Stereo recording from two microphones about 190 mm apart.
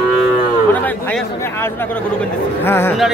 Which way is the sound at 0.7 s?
10° left (ahead or behind).